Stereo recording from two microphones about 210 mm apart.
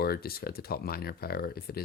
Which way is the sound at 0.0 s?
45° left (ahead or behind).